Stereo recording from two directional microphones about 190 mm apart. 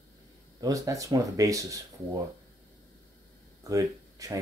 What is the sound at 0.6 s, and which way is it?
Speech, 20° right (ahead or behind).